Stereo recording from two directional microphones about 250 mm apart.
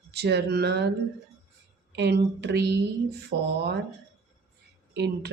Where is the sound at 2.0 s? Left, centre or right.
Right.